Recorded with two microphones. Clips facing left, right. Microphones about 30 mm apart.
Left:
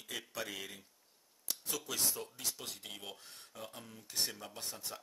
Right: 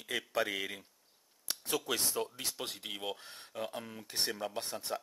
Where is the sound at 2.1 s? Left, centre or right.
Right.